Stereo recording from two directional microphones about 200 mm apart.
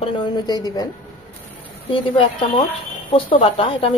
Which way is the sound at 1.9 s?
25° left (ahead or behind).